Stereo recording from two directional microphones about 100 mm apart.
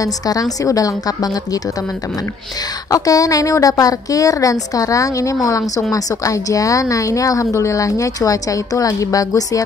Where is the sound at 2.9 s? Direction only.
35° left (ahead or behind).